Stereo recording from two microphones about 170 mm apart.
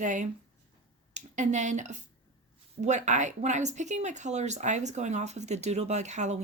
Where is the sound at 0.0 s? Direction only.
45° right (ahead or behind).